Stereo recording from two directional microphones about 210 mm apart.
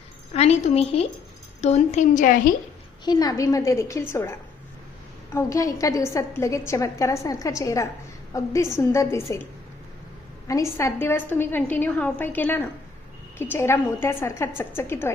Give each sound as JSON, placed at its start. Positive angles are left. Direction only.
{"t": 0.3, "sound": "a woman's voice", "side_deg": 30}
{"t": 3.0, "sound": "a woman's voice", "side_deg": 20}